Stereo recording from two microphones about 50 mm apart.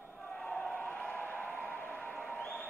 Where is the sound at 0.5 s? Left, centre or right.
Left.